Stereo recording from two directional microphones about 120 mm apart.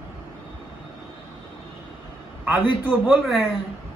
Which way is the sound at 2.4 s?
15° right (ahead or behind).